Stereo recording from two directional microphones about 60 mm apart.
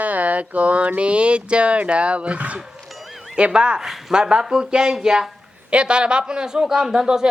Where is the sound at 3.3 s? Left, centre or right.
Centre.